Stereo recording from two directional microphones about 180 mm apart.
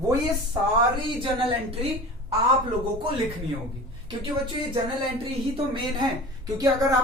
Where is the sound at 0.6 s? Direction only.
15° right (ahead or behind).